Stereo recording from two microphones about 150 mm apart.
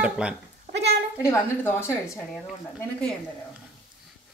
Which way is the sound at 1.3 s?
15° left (ahead or behind).